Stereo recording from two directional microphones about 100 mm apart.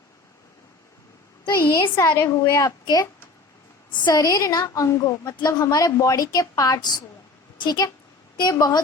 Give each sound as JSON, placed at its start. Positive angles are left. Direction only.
{"t": 1.5, "sound": "a woman's voice", "side_deg": 25}